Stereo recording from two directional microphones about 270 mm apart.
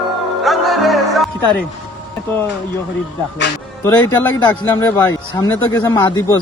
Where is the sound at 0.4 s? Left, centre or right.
Centre.